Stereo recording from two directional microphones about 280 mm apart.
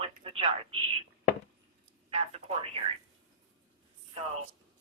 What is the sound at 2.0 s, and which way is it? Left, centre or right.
Telephone, right.